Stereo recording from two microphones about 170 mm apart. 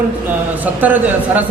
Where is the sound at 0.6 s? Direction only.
10° right (ahead or behind).